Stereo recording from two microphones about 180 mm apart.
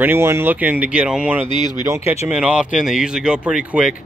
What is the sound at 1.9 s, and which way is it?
Speech, 15° right (ahead or behind).